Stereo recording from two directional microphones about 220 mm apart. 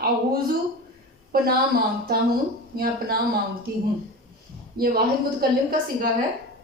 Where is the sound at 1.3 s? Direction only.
45° right (ahead or behind).